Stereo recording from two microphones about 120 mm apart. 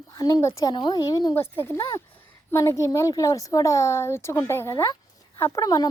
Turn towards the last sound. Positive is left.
turn(degrees=30)  # may be behind; listen again after turning